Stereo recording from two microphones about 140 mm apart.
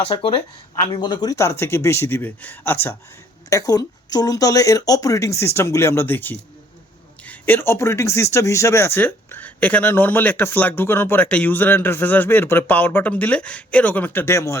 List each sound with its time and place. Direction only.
0.0 s speech: 40° left (ahead or behind); by 2.9 s 15° left (ahead or behind)
3.5 s speech: 25° left (ahead or behind)